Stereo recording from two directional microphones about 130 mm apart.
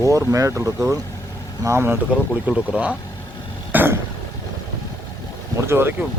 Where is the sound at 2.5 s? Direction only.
10° right (ahead or behind).